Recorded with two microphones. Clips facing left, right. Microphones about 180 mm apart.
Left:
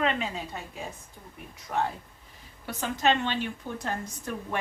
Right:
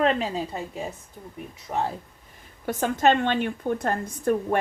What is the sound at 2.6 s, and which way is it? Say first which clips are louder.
A woman's voice: right 6 dB; 50° right (ahead or behind).